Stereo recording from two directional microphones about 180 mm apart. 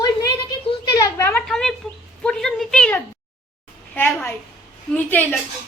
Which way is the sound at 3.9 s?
15° left (ahead or behind).